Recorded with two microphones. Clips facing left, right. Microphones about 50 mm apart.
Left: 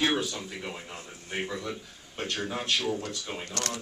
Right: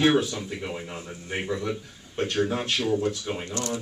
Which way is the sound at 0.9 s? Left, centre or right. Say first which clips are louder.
Right 4 dB; right.